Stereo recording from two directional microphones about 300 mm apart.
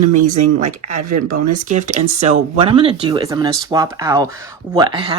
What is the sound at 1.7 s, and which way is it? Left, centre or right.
Speech, right.